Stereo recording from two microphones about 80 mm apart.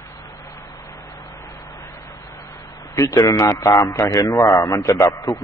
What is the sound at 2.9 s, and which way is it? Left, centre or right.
A man's voice, left.